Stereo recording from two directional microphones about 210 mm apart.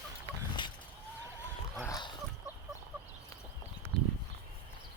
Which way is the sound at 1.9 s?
20° left (ahead or behind).